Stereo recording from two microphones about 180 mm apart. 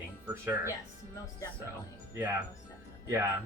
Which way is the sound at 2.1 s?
15° right (ahead or behind).